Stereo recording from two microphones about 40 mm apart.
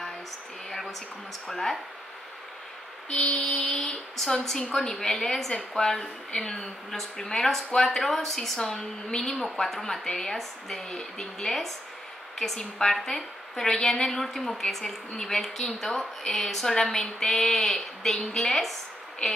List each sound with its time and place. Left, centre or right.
1.5 s a woman's voice: centre
3.1 s music: left
3.6 s a woman's voice: centre